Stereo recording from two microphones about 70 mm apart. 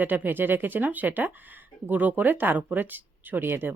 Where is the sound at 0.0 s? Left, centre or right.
Right.